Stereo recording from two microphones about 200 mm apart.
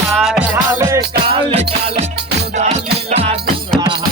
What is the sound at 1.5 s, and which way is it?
Music, 30° right (ahead or behind).